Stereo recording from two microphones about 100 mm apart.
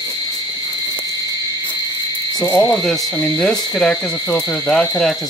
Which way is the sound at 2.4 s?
30° left (ahead or behind).